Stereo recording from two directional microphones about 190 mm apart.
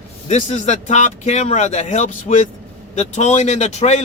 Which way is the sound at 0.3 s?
35° left (ahead or behind).